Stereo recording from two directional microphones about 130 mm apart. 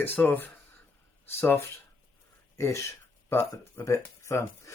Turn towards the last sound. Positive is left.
turn(degrees=20)  # may be behind; listen again after turning